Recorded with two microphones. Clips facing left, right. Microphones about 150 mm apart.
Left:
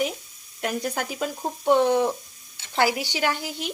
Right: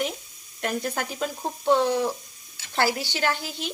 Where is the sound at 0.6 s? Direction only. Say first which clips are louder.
Left 1 dB; 5° left (ahead or behind).